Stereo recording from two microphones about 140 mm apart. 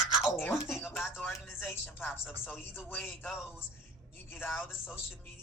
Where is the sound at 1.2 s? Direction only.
15° left (ahead or behind).